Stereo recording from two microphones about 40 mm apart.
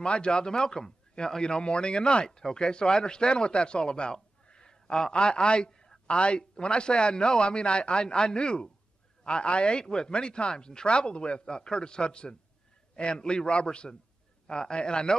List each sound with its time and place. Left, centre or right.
0.0 s speech: left